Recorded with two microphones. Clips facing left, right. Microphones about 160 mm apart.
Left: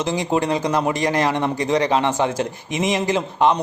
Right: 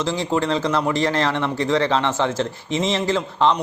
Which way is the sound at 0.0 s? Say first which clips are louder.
Left 1 dB; 20° left (ahead or behind).